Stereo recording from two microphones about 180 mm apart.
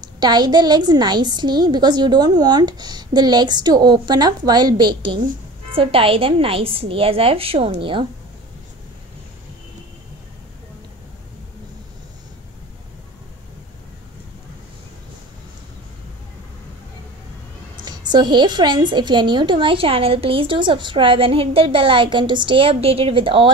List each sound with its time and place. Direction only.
0.2 s a woman's voice: 25° right (ahead or behind)
17.8 s a woman's voice: 25° right (ahead or behind)